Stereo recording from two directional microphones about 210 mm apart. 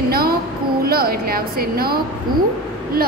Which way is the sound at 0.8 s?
45° right (ahead or behind).